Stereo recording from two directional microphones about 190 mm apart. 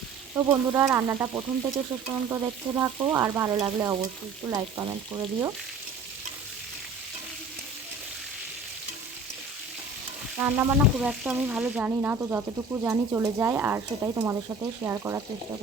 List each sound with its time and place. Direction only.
0.3 s frying: 15° right (ahead or behind)
10.3 s frying: 10° right (ahead or behind)